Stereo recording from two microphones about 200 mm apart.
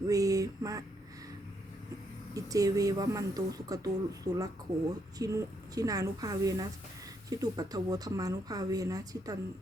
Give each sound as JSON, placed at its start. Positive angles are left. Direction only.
{"t": 0.1, "sound": "speech", "side_deg": -15}
{"t": 2.3, "sound": "speech", "side_deg": -15}